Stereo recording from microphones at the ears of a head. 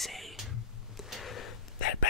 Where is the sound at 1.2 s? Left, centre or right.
Left.